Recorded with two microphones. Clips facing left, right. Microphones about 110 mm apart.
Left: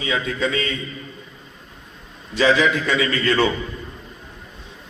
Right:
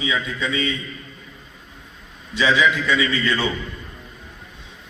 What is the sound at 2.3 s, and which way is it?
A man's voice, 45° left (ahead or behind).